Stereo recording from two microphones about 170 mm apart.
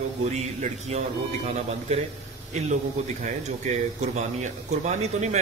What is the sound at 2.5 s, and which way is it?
A man's voice, 45° right (ahead or behind).